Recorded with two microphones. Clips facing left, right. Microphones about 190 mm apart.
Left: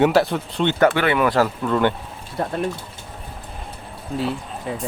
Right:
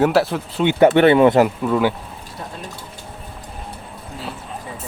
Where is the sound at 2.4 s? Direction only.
60° left (ahead or behind).